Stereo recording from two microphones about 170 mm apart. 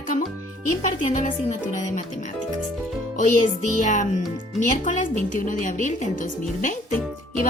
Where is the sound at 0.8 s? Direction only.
45° left (ahead or behind).